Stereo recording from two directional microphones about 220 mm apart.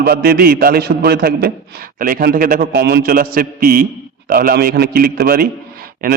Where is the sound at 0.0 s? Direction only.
45° right (ahead or behind).